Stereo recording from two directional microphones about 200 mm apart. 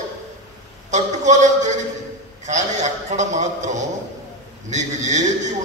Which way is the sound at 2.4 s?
35° right (ahead or behind).